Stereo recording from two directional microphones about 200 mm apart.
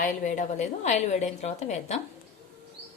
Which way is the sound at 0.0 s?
40° left (ahead or behind).